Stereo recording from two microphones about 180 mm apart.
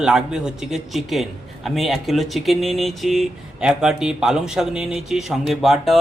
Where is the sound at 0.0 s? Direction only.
5° right (ahead or behind).